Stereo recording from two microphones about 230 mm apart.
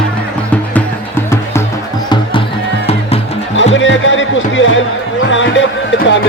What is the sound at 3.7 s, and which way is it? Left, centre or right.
Music, left.